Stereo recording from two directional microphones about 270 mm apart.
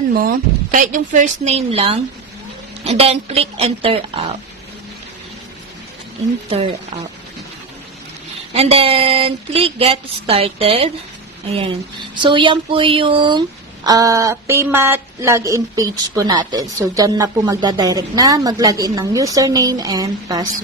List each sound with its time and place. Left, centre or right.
0.1 s a woman's voice: right
8.5 s a woman's voice: right